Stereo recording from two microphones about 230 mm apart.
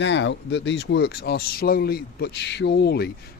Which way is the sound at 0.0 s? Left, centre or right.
Left.